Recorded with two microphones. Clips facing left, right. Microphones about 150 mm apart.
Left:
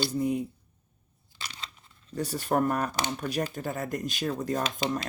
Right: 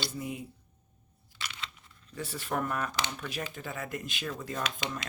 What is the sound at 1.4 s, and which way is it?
Crunch, 35° left (ahead or behind).